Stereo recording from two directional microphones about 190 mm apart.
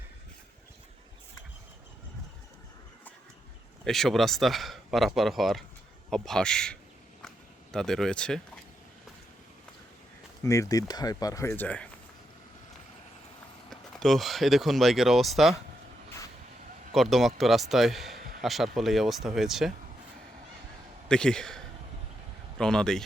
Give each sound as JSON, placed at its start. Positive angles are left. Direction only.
{"t": 3.8, "sound": "speech", "side_deg": 0}
{"t": 10.4, "sound": "speech", "side_deg": 15}
{"t": 13.7, "sound": "speech", "side_deg": 0}
{"t": 16.9, "sound": "speech", "side_deg": 0}
{"t": 18.2, "sound": "a sound", "side_deg": -50}
{"t": 18.4, "sound": "speech", "side_deg": 0}
{"t": 21.1, "sound": "speech", "side_deg": 5}